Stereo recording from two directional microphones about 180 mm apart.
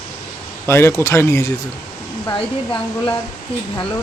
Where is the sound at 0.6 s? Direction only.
15° left (ahead or behind).